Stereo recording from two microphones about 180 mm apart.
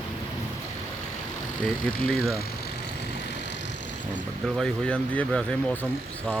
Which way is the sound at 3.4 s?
75° left (ahead or behind).